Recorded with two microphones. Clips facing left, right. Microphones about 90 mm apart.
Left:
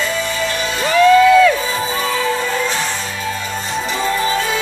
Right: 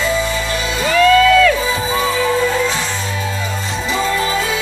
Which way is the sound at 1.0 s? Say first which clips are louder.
Left 2 dB; 20° left (ahead or behind).